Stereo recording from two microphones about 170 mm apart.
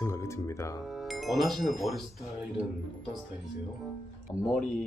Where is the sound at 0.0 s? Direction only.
15° left (ahead or behind).